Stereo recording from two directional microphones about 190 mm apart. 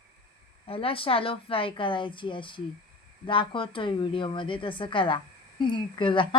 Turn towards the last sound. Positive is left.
turn(degrees=25)  # may be behind; listen again after turning